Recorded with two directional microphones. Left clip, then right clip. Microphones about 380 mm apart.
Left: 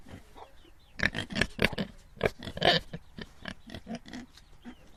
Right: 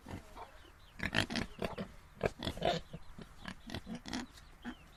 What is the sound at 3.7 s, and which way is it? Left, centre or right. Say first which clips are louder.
Pig: left 1 dB; centre.